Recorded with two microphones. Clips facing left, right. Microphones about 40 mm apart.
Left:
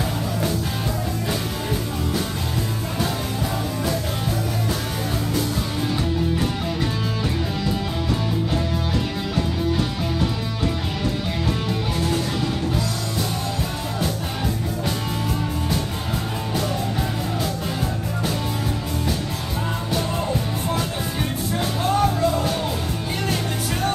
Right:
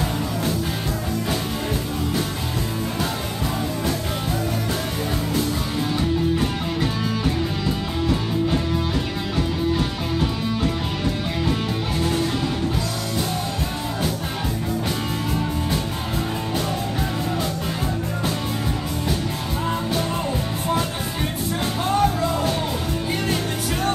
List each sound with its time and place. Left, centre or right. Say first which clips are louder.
5.9 s music: right 3 dB; centre
21.8 s music: left 1 dB; centre